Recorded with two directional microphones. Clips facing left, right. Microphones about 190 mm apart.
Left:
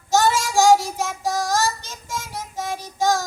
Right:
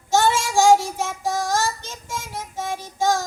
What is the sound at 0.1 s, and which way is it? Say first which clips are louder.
Child singing: even; 40° left (ahead or behind).